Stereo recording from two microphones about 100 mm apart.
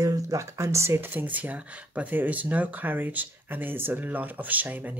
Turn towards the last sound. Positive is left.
turn(degrees=-15)  # may be behind; listen again after turning